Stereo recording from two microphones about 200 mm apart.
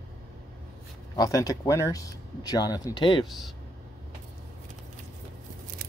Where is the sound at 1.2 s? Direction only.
15° left (ahead or behind).